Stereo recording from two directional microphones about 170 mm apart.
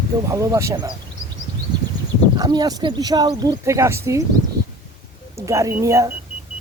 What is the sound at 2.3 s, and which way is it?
Speech, 25° right (ahead or behind).